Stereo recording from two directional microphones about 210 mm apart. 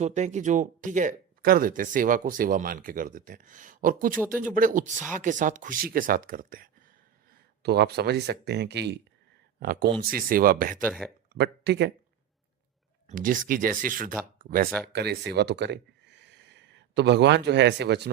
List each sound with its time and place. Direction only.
0.0 s speech: 35° right (ahead or behind)
10.8 s speech: 5° right (ahead or behind)
11.3 s speech: 55° right (ahead or behind)
13.1 s speech: 40° right (ahead or behind)